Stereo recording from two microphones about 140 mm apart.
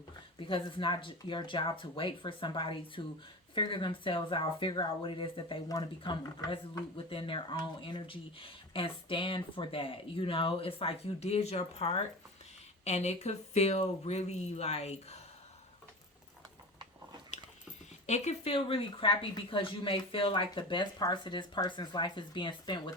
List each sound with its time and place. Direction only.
0.3 s speech: 35° left (ahead or behind)
18.0 s speech: 55° left (ahead or behind); by 22.8 s 35° left (ahead or behind)